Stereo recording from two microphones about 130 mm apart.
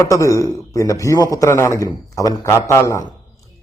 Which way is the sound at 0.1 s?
25° left (ahead or behind).